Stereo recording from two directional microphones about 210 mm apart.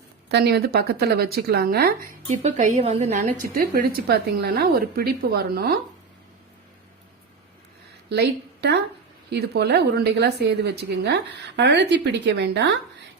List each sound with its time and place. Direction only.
0.3 s speech: 50° right (ahead or behind)
2.2 s a woman's voice: 30° right (ahead or behind); by 5.7 s 50° right (ahead or behind)
8.1 s a woman's voice: 50° right (ahead or behind)